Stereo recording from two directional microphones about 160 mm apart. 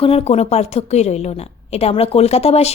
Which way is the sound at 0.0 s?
40° left (ahead or behind).